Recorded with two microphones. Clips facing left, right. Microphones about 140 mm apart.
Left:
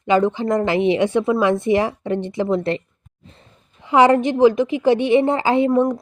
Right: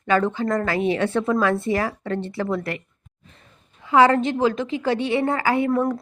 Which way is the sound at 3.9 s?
20° left (ahead or behind).